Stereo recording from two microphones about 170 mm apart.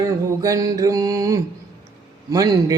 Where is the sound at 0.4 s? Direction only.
20° right (ahead or behind).